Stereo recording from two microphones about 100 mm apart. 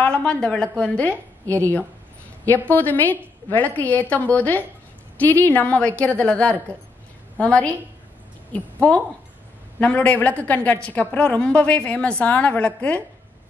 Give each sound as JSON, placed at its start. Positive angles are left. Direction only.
{"t": 0.0, "sound": "a woman's voice", "side_deg": 10}
{"t": 9.8, "sound": "a woman's voice", "side_deg": 15}